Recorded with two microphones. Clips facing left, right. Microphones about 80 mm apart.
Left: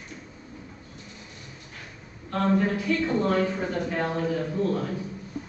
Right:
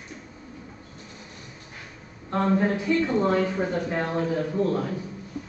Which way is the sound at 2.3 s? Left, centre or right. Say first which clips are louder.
Right 1 dB; right.